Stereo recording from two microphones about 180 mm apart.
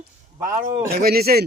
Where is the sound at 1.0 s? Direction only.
60° right (ahead or behind).